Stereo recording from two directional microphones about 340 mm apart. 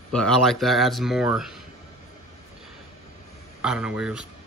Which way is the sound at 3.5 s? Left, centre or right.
Centre.